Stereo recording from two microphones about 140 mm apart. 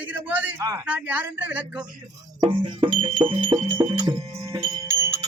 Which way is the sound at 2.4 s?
35° right (ahead or behind).